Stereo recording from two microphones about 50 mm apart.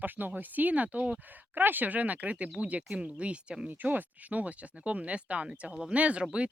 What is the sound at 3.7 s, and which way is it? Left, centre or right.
Speech, right.